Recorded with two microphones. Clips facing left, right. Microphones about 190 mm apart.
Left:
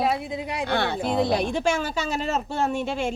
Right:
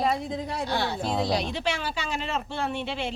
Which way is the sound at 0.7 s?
60° left (ahead or behind).